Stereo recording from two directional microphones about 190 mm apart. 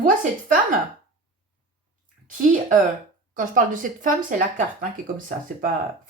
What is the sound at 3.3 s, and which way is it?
Speech, 45° right (ahead or behind).